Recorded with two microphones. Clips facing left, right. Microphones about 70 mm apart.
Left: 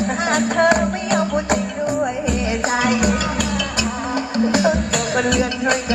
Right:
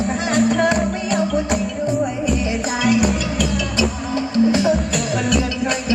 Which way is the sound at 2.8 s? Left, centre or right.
Left.